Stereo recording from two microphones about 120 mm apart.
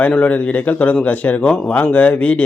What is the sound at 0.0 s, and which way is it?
A man's voice, 10° left (ahead or behind).